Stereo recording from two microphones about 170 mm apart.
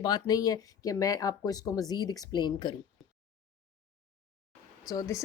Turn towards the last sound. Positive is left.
turn(degrees=20)  # may be behind; listen again after turning